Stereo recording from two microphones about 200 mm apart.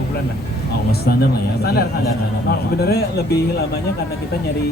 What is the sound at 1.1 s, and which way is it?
Speech, 50° left (ahead or behind).